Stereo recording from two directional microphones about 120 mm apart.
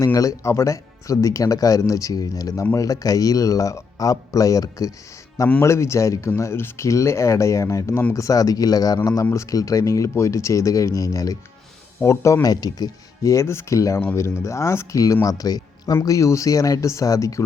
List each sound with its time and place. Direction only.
0.0 s speech: 30° left (ahead or behind)